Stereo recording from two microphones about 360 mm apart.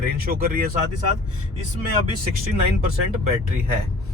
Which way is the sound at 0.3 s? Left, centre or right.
Right.